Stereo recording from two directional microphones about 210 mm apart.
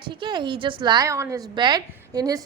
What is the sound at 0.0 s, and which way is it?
A woman's voice, 20° right (ahead or behind).